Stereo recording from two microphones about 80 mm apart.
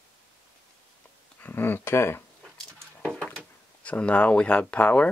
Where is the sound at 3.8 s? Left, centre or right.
Centre.